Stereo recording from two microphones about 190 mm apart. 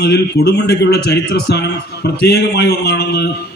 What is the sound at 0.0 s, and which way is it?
A man's voice, 55° left (ahead or behind).